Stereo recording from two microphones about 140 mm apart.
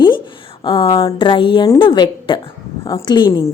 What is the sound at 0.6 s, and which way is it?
A woman's voice, 35° left (ahead or behind).